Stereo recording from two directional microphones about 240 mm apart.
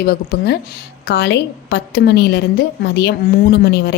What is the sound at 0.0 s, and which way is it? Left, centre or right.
A woman's voice, left.